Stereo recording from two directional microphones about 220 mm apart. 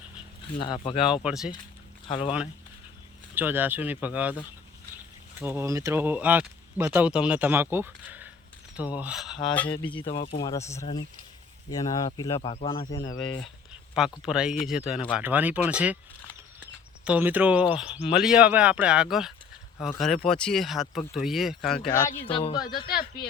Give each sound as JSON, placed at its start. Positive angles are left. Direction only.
{"t": 0.6, "sound": "speech", "side_deg": 20}
{"t": 1.2, "sound": "speech", "side_deg": -5}
{"t": 2.0, "sound": "speech", "side_deg": 25}
{"t": 3.3, "sound": "speech", "side_deg": -10}
{"t": 5.4, "sound": "speech", "side_deg": -10}
{"t": 9.8, "sound": "speech", "side_deg": 20}
{"t": 14.2, "sound": "speech", "side_deg": -5}
{"t": 17.1, "sound": "speech", "side_deg": -10}
{"t": 22.2, "sound": "speech", "side_deg": 25}
{"t": 22.9, "sound": "a man's voice", "side_deg": 40}